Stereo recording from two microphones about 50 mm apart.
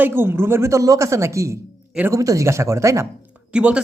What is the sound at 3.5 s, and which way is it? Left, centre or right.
Speech, right.